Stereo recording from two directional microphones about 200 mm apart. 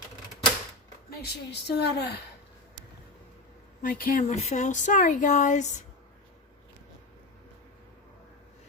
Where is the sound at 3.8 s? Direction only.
45° left (ahead or behind).